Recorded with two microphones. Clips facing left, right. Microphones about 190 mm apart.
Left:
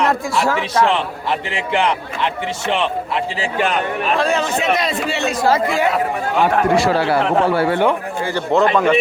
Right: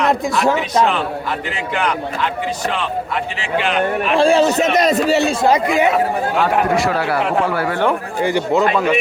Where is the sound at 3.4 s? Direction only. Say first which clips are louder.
Right 1 dB; 45° left (ahead or behind).